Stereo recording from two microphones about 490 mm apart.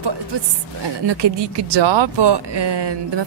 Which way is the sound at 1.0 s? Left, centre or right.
Right.